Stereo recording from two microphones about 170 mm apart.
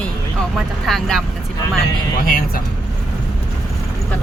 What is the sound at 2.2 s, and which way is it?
Speech, 55° left (ahead or behind).